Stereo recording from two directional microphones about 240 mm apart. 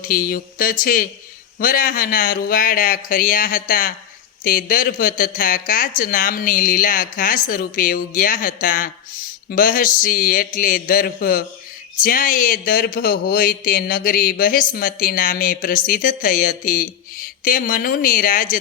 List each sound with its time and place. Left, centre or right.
0.0 s speech: left